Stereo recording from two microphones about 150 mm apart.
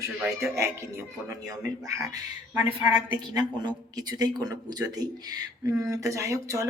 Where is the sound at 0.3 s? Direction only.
20° right (ahead or behind).